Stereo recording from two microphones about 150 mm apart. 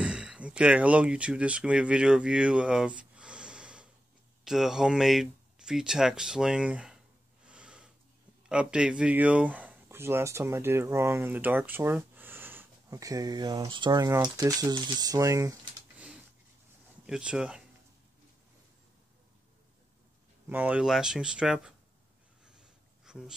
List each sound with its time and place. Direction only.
0.0 s speech: 5° right (ahead or behind)
7.4 s snort: 5° right (ahead or behind)
8.5 s speech: 5° right (ahead or behind); by 15.5 s 20° right (ahead or behind)
17.0 s speech: 5° right (ahead or behind)
20.4 s speech: 10° right (ahead or behind)
22.4 s a sound: 5° right (ahead or behind)